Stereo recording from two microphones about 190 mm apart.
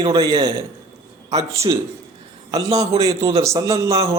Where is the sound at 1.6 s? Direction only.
15° right (ahead or behind).